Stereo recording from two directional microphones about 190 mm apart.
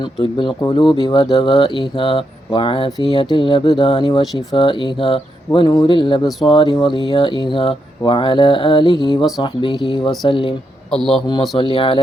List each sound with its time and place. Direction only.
0.0 s speech: 25° left (ahead or behind)